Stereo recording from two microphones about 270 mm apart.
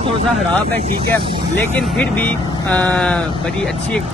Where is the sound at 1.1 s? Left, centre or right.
Centre.